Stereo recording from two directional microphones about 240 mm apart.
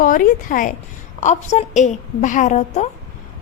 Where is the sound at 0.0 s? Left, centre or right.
Left.